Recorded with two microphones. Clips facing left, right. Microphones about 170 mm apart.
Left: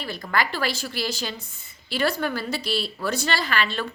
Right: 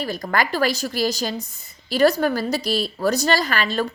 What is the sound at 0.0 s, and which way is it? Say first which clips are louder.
A woman's voice: right 3 dB; 40° right (ahead or behind).